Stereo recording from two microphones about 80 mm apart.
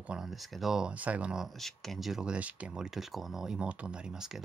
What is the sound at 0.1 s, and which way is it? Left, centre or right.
Speech, centre.